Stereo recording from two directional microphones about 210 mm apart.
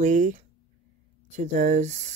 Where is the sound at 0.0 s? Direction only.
35° right (ahead or behind).